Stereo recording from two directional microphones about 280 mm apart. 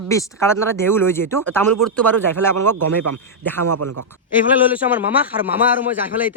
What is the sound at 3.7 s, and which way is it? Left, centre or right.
Speech, right.